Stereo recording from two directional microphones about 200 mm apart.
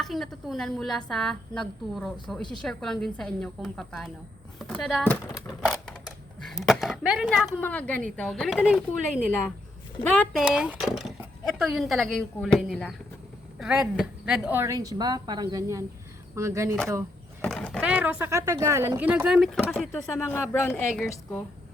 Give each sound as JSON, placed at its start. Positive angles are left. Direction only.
{"t": 0.0, "sound": "speech", "side_deg": 0}
{"t": 5.6, "sound": "a sound", "side_deg": 5}
{"t": 7.6, "sound": "a woman's voice", "side_deg": 10}
{"t": 10.0, "sound": "speech", "side_deg": 5}
{"t": 10.4, "sound": "a woman's voice", "side_deg": -5}
{"t": 17.4, "sound": "a woman's voice", "side_deg": 5}